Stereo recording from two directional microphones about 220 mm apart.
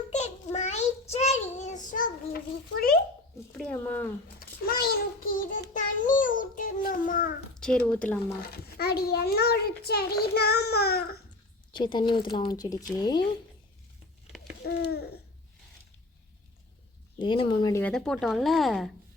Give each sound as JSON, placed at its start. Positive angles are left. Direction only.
{"t": 0.1, "sound": "child singing", "side_deg": 30}
{"t": 3.6, "sound": "speech", "side_deg": 5}
{"t": 4.4, "sound": "child singing", "side_deg": 45}
{"t": 7.5, "sound": "speech", "side_deg": 5}
{"t": 8.4, "sound": "a child's voice", "side_deg": 45}
{"t": 11.7, "sound": "speech", "side_deg": 20}
{"t": 14.6, "sound": "a child's voice", "side_deg": 45}
{"t": 17.2, "sound": "speech", "side_deg": 20}